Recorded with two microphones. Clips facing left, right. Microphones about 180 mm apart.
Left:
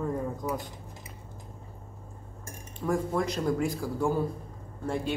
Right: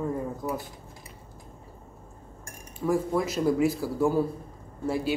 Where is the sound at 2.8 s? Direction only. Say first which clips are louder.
Right 2 dB; 5° right (ahead or behind).